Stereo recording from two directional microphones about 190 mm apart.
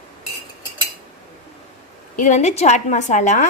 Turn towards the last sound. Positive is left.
turn(degrees=40)  # may be behind; listen again after turning